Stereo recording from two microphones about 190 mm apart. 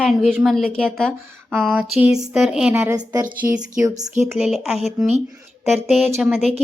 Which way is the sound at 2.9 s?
20° right (ahead or behind).